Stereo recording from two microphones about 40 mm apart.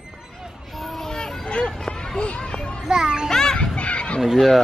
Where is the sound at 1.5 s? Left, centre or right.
Left.